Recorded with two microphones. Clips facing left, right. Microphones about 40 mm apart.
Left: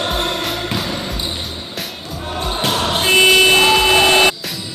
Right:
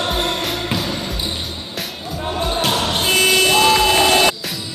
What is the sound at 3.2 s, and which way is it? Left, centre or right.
Vehicle, left.